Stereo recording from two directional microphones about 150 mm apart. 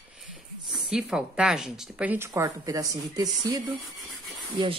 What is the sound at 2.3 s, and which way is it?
Speech, 25° right (ahead or behind).